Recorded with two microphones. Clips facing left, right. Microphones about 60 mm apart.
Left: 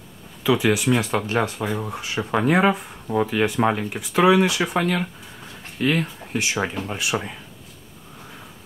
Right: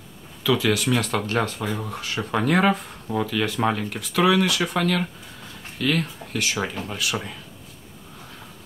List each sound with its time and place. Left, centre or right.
0.4 s speech: left
3.3 s speech: left